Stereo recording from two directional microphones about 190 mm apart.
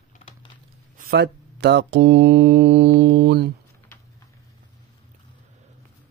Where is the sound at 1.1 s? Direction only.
60° right (ahead or behind).